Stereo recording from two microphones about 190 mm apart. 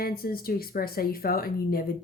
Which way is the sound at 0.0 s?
50° left (ahead or behind).